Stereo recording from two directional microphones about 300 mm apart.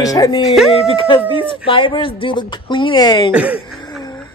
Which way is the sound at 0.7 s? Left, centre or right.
Centre.